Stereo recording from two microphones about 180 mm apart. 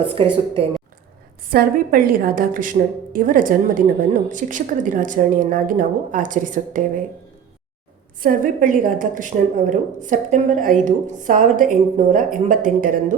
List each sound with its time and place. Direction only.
0.0 s a woman's voice: 30° right (ahead or behind)
1.5 s a woman's voice: 55° right (ahead or behind)
8.2 s a woman's voice: 50° right (ahead or behind)